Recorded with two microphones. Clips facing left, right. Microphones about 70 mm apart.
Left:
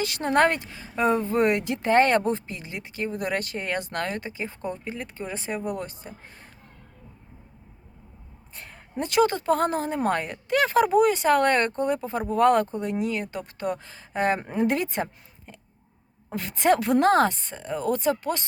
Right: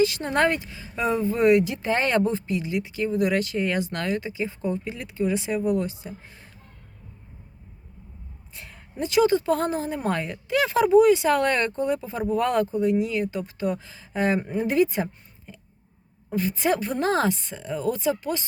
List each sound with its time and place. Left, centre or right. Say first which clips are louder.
0.0 s speech: even; left
8.5 s speech: left 2 dB; left